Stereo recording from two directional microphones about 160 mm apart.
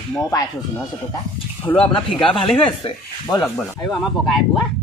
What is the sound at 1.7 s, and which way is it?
Speech, 35° left (ahead or behind).